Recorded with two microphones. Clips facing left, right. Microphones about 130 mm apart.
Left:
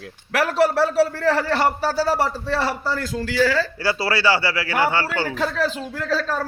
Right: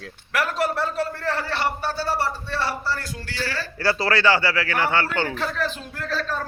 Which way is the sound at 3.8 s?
10° left (ahead or behind).